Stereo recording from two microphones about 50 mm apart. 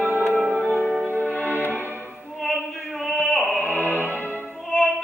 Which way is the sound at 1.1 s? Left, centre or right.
Left.